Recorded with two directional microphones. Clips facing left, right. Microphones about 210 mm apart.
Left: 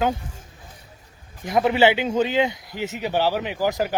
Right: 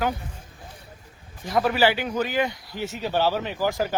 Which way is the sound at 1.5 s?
20° left (ahead or behind).